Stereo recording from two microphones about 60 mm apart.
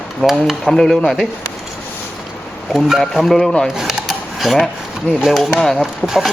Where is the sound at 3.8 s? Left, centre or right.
Centre.